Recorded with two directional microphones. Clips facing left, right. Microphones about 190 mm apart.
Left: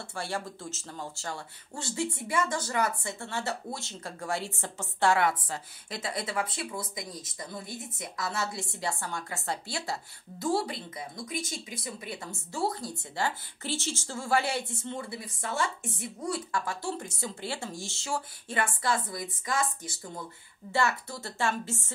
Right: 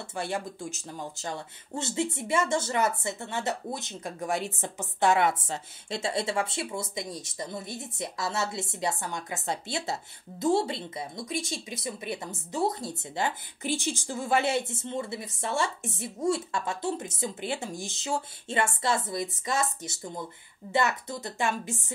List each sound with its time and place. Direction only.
0.1 s speech: 20° right (ahead or behind)